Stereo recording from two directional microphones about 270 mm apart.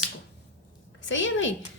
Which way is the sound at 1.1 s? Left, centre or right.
Left.